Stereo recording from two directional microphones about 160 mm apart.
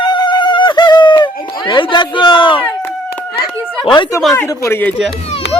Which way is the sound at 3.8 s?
30° left (ahead or behind).